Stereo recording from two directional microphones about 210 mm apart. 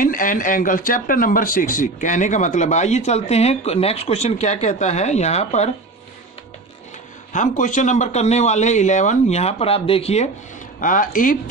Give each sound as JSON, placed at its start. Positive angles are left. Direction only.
{"t": 0.0, "sound": "speech", "side_deg": 40}
{"t": 7.3, "sound": "speech", "side_deg": 35}